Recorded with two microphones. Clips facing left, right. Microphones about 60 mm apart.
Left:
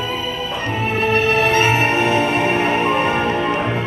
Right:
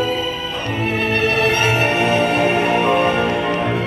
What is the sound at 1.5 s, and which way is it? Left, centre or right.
Music, left.